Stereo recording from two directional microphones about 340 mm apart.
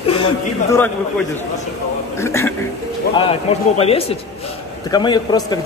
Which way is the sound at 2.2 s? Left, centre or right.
Centre.